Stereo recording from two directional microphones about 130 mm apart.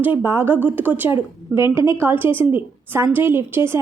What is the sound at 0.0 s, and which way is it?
A woman's voice, 15° right (ahead or behind).